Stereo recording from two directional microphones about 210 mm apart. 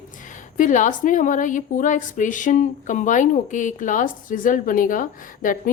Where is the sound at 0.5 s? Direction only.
35° left (ahead or behind).